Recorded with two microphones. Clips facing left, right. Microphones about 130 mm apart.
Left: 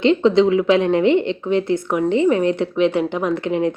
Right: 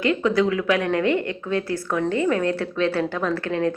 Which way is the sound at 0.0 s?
25° left (ahead or behind).